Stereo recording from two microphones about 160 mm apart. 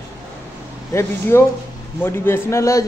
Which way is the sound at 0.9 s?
15° left (ahead or behind).